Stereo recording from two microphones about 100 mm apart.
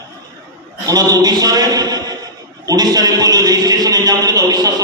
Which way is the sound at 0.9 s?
40° right (ahead or behind).